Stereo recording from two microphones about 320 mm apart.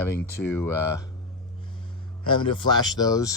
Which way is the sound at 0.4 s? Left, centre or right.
Centre.